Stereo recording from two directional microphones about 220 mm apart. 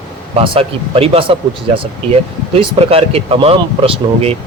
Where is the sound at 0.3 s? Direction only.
25° right (ahead or behind).